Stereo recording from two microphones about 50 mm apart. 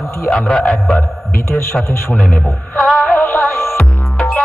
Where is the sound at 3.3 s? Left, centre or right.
Left.